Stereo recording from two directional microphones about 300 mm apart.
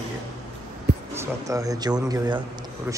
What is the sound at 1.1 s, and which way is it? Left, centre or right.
Speech, centre.